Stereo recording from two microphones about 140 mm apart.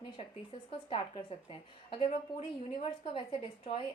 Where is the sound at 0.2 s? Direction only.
50° left (ahead or behind).